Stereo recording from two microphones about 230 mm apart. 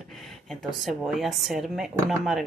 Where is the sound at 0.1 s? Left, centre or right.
Centre.